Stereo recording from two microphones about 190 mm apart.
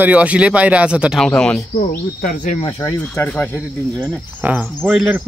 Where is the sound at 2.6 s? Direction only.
25° left (ahead or behind).